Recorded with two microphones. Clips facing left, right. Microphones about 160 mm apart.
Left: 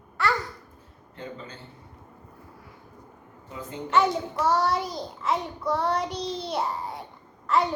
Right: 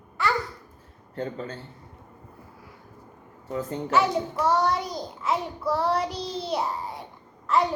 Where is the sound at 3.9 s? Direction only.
Centre (ahead or behind).